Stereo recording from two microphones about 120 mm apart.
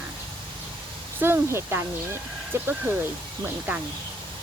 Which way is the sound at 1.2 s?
20° right (ahead or behind).